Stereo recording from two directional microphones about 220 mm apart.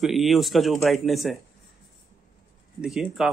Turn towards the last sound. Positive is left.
turn(degrees=0)  # may be behind; listen again after turning